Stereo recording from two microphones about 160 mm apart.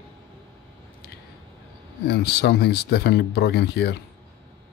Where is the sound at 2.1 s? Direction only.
90° left.